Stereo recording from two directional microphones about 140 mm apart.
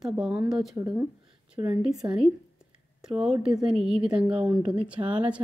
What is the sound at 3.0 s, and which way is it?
A woman's voice, 5° right (ahead or behind).